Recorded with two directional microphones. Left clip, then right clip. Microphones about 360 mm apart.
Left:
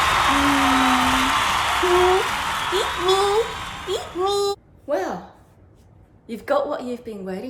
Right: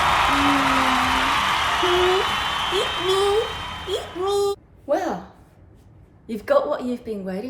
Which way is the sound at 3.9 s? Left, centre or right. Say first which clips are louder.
Left 1 dB; centre.